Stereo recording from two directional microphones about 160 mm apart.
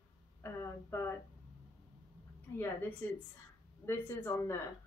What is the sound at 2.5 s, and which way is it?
A woman's voice, 15° left (ahead or behind).